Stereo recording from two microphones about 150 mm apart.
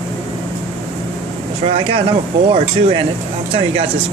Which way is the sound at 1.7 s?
35° right (ahead or behind).